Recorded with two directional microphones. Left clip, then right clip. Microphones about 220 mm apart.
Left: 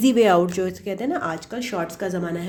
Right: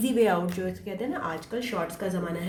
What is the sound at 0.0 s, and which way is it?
Speech, 45° left (ahead or behind).